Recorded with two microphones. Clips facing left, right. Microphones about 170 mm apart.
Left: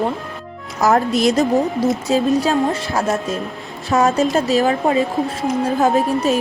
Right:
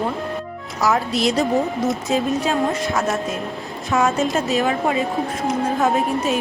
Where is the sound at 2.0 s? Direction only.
35° left (ahead or behind).